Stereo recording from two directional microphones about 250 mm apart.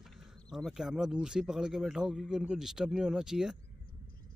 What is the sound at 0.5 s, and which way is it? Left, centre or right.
Speech, centre.